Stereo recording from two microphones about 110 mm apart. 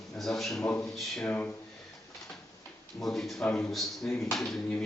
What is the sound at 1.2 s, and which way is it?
Speech, 15° left (ahead or behind).